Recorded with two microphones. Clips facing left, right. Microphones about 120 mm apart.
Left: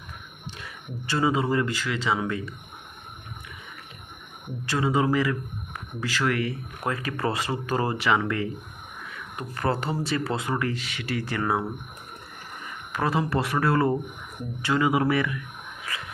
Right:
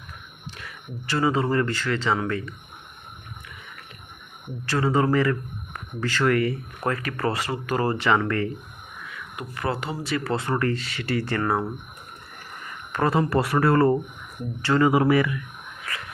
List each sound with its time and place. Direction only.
0.5 s speech: 25° left (ahead or behind)
4.6 s speech: 15° left (ahead or behind); by 6.6 s centre (ahead or behind)
6.8 s speech: 20° left (ahead or behind)
7.9 s speech: 5° left (ahead or behind)
9.0 s speech: 35° left (ahead or behind)
10.6 s speech: 5° left (ahead or behind)
12.9 s speech: centre (ahead or behind)